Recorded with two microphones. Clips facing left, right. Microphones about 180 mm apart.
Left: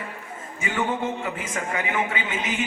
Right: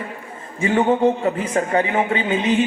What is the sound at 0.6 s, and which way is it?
A man's voice, 35° right (ahead or behind).